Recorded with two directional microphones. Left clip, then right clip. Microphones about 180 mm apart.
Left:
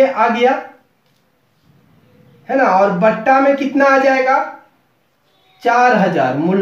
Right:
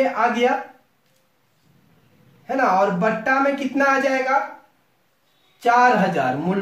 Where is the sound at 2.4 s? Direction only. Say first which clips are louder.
Left 6 dB; 15° right (ahead or behind).